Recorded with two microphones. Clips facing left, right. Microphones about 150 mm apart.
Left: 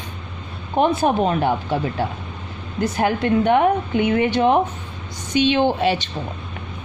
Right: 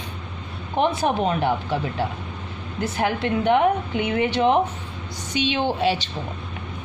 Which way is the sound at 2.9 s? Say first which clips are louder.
Left 4 dB; 45° left (ahead or behind).